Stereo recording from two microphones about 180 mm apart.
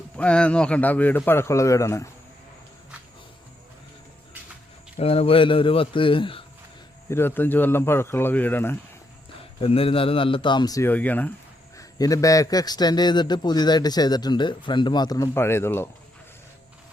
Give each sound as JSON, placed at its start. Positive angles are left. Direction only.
{"t": 0.2, "sound": "a man's voice", "side_deg": 5}
{"t": 4.9, "sound": "a man's voice", "side_deg": 35}
{"t": 7.1, "sound": "a man's voice", "side_deg": 10}
{"t": 9.4, "sound": "a man's voice", "side_deg": 30}
{"t": 11.8, "sound": "a man's voice", "side_deg": 20}